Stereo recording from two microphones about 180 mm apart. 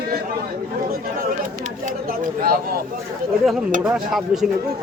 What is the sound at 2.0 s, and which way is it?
Speech, 50° right (ahead or behind).